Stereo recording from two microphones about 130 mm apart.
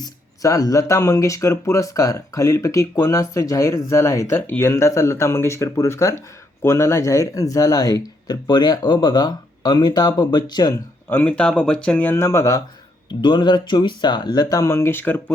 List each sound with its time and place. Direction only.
0.0 s speech: 25° left (ahead or behind)
11.1 s speech: 10° left (ahead or behind)
13.1 s speech: 35° left (ahead or behind); by 15.2 s 15° left (ahead or behind)